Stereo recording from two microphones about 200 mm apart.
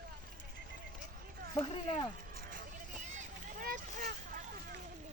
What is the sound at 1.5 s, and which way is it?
Speech, 25° left (ahead or behind).